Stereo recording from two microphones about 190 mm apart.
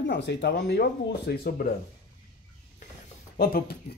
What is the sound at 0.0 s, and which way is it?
Speech, 65° left (ahead or behind).